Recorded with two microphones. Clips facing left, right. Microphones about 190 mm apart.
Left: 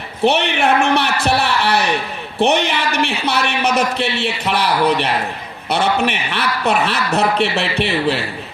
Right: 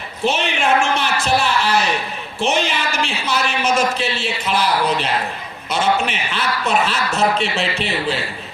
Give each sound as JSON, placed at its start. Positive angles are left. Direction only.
{"t": 0.3, "sound": "a man's voice", "side_deg": 65}